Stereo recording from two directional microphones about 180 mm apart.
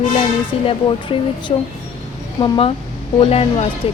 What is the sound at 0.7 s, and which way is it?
Speech, 30° left (ahead or behind).